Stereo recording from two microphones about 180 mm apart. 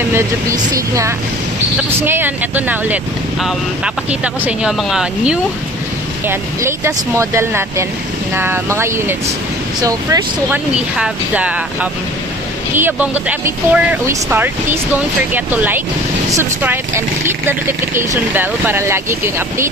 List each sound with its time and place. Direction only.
0.1 s speech: 15° right (ahead or behind)
10.7 s speech: 5° right (ahead or behind)